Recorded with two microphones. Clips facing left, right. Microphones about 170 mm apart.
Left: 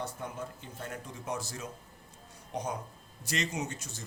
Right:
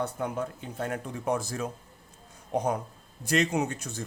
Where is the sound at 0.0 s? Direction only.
65° right (ahead or behind).